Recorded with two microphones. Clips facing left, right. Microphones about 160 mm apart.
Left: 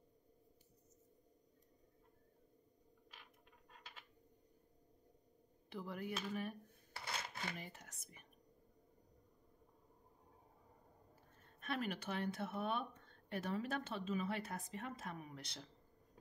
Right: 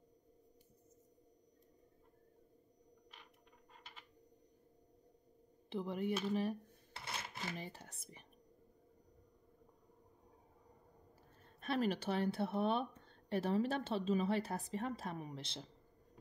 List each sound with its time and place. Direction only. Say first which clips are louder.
5.7 s speech: right 7 dB; 25° right (ahead or behind)
11.6 s speech: right 6 dB; 35° right (ahead or behind)